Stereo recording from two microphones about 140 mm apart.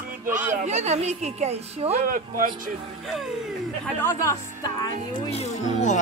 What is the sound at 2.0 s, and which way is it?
Speech, 90° right.